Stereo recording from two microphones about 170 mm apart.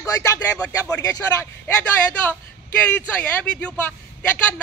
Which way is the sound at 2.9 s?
10° left (ahead or behind).